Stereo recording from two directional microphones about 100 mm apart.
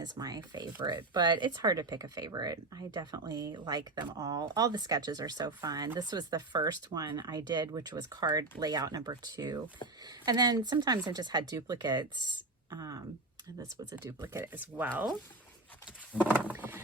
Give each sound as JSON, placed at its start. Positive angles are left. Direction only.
{"t": 0.0, "sound": "speech", "side_deg": -40}
{"t": 12.7, "sound": "speech", "side_deg": -35}
{"t": 14.0, "sound": "speech", "side_deg": -30}
{"t": 16.5, "sound": "vehicle", "side_deg": -20}